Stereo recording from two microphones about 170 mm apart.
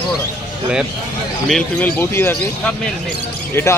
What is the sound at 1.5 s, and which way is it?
Speech, 10° left (ahead or behind).